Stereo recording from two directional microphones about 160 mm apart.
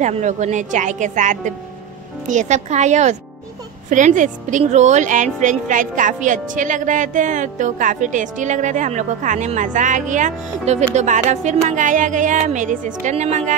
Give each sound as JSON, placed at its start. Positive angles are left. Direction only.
{"t": 0.0, "sound": "a woman's voice", "side_deg": -50}